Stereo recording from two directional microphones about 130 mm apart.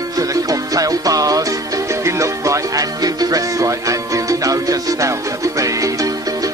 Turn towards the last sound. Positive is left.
turn(degrees=-25)  # may be behind; listen again after turning